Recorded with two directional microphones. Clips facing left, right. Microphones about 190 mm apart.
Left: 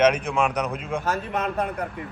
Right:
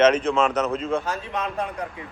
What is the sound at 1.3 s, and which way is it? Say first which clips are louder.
Speech: left 2 dB; 50° left (ahead or behind).